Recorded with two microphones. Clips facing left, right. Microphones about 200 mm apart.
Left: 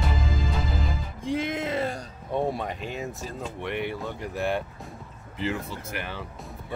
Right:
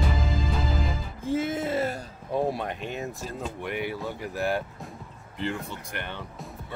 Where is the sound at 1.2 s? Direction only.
5° right (ahead or behind).